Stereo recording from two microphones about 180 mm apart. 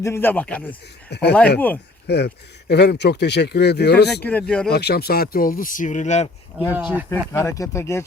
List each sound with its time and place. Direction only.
0.0 s speech: 15° left (ahead or behind)
2.0 s speech: 65° left (ahead or behind)
4.1 s speech: 10° left (ahead or behind)
4.7 s speech: 60° left (ahead or behind); by 6.2 s 40° left (ahead or behind)
6.7 s speech: 10° right (ahead or behind)
7.1 s speech: 15° left (ahead or behind)